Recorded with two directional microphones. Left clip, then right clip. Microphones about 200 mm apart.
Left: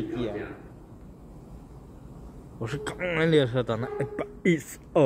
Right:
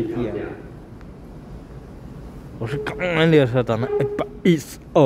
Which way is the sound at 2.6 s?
10° left (ahead or behind).